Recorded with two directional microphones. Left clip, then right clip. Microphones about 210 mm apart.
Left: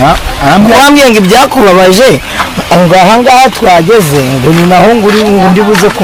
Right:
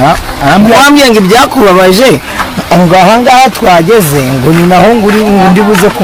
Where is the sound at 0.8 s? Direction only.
45° left (ahead or behind).